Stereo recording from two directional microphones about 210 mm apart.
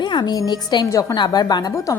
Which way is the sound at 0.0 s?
20° left (ahead or behind).